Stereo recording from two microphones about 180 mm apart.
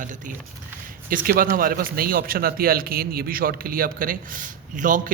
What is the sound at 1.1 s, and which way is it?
A man's voice, 50° right (ahead or behind).